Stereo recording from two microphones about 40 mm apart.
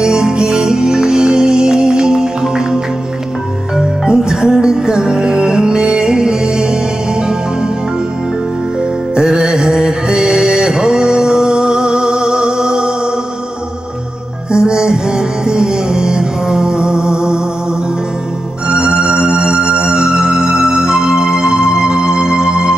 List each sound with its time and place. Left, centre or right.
0.0 s music: centre
9.1 s music: centre
14.5 s music: centre
18.7 s music: centre